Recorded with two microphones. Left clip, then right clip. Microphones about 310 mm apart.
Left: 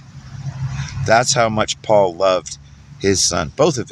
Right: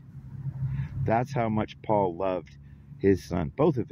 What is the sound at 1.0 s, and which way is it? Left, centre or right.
Speech, right.